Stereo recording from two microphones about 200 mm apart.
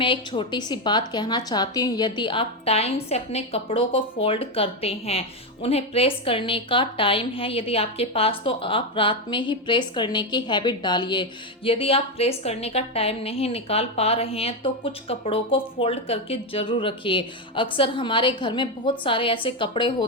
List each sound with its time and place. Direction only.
0.0 s a woman's voice: 25° left (ahead or behind)